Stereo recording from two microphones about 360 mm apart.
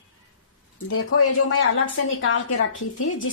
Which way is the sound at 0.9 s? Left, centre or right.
Left.